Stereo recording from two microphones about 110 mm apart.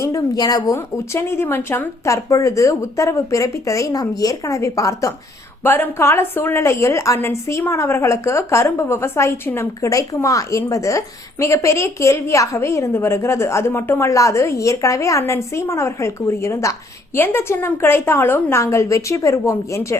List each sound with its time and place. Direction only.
0.0 s a woman's voice: 35° left (ahead or behind)
5.6 s a woman's voice: 20° left (ahead or behind)